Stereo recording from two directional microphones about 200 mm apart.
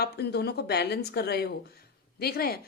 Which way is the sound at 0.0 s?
55° left (ahead or behind).